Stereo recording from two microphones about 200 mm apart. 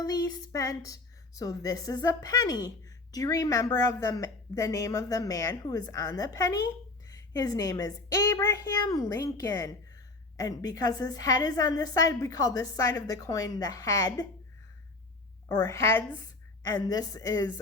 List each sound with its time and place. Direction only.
0.0 s a woman's voice: 15° left (ahead or behind)
15.4 s a woman's voice: 15° left (ahead or behind)